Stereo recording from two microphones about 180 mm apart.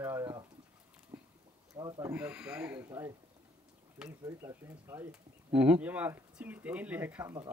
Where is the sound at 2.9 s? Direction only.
20° right (ahead or behind).